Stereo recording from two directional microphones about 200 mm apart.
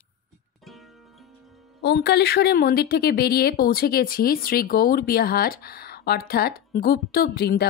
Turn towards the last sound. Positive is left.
turn(degrees=50)  # may be behind; listen again after turning